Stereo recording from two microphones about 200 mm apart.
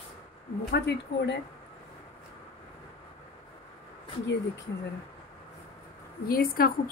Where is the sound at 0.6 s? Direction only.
55° left (ahead or behind).